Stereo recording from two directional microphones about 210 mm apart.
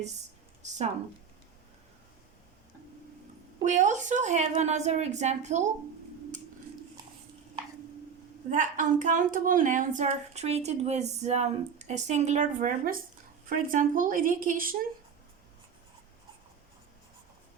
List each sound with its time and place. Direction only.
3.6 s a woman's voice: 35° right (ahead or behind)
8.4 s a woman's voice: 35° right (ahead or behind)